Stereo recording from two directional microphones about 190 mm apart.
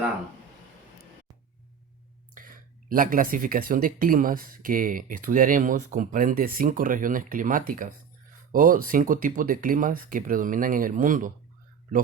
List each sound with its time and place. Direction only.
2.3 s speech: 45° right (ahead or behind)